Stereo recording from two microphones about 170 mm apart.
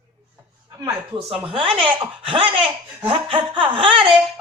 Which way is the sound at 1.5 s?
30° right (ahead or behind).